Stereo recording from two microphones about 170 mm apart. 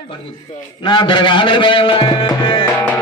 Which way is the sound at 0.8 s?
30° left (ahead or behind).